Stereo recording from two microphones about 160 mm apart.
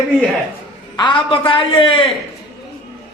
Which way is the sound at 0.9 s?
30° left (ahead or behind).